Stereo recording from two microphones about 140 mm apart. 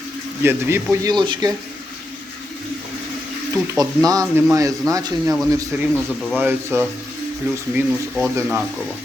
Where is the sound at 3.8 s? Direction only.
25° right (ahead or behind).